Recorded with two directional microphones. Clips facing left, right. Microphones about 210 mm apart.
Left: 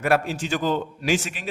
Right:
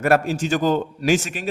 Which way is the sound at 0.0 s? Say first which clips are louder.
Right 4 dB; 45° right (ahead or behind).